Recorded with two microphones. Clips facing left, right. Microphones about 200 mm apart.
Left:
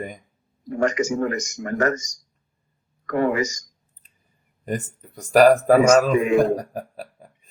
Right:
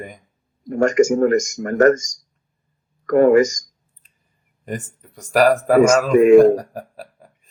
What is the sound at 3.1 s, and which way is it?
Speech, 45° right (ahead or behind).